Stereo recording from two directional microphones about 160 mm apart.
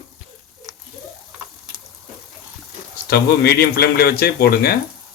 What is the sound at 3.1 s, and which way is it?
Speech, 75° left (ahead or behind).